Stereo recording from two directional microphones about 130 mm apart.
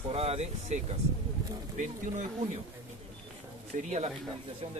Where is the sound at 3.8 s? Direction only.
60° right (ahead or behind).